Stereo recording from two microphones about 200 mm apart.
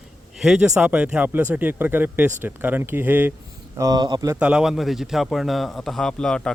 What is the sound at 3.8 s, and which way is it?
Speech, 20° right (ahead or behind).